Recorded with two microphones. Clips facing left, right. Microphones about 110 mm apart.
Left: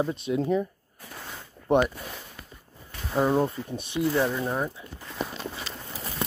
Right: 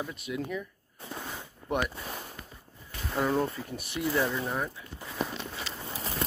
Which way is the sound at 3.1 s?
20° left (ahead or behind).